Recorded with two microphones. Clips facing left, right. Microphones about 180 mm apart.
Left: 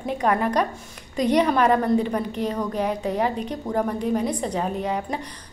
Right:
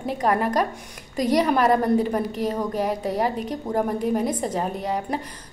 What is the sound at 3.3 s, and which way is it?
A woman's voice, 5° right (ahead or behind).